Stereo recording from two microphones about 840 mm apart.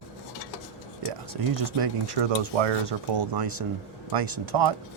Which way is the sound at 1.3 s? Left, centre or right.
Right.